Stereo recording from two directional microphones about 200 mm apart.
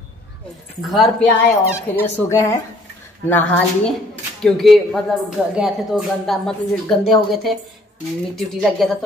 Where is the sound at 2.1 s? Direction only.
15° left (ahead or behind).